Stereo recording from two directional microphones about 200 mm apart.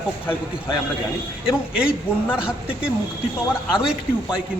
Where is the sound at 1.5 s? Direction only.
5° right (ahead or behind).